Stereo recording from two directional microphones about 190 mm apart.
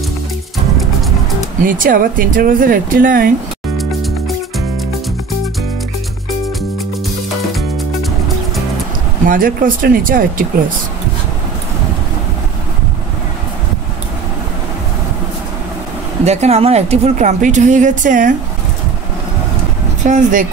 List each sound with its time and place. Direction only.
1.6 s speech: 45° right (ahead or behind)
3.7 s music: centre (ahead or behind)
7.5 s music: centre (ahead or behind)
9.2 s speech: 45° right (ahead or behind)
16.3 s a woman's voice: 35° right (ahead or behind)
20.0 s a woman's voice: 40° right (ahead or behind)